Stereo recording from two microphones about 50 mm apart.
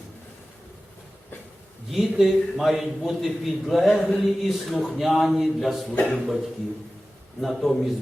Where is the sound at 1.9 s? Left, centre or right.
Centre.